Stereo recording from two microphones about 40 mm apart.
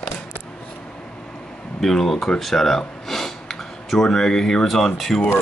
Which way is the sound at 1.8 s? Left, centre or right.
Centre.